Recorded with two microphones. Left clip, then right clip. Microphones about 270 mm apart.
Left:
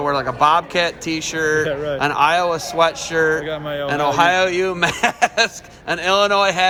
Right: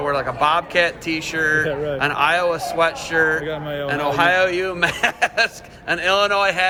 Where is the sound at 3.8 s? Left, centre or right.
Left.